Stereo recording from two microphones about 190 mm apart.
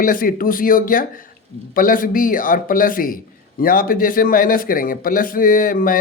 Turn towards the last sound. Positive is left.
turn(degrees=45)  # may be behind; listen again after turning